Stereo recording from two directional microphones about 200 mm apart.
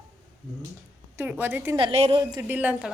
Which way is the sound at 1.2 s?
10° right (ahead or behind).